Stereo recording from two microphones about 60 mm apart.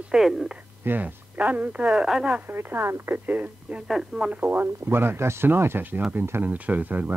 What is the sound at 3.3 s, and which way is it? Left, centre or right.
Speech, right.